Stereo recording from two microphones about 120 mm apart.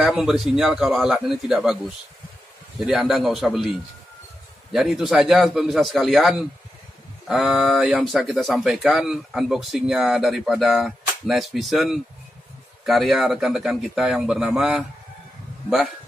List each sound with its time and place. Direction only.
0.0 s speech: 5° right (ahead or behind)
2.8 s speech: 5° right (ahead or behind)